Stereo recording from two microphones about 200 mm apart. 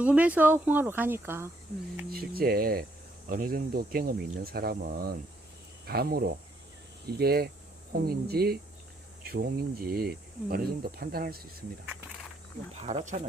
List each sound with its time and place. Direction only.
0.0 s speech: 5° right (ahead or behind)
2.0 s speech: 50° right (ahead or behind)
12.8 s speech: 35° right (ahead or behind)